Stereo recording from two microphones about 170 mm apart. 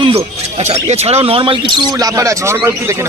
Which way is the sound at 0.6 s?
40° right (ahead or behind).